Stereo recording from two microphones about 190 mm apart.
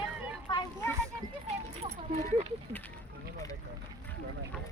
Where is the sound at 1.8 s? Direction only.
40° right (ahead or behind).